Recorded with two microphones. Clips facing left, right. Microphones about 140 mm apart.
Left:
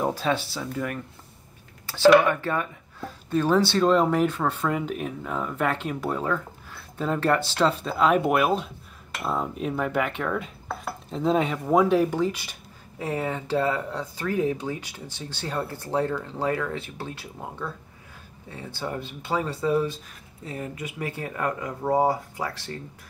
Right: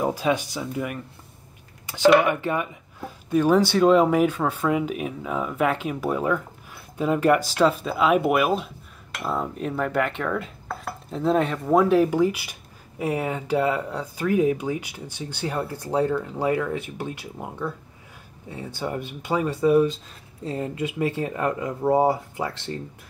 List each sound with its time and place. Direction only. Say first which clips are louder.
0.0 s speech: right 2 dB; 10° right (ahead or behind)